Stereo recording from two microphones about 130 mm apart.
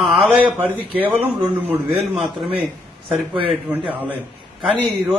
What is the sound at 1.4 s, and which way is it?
Speech, 15° right (ahead or behind).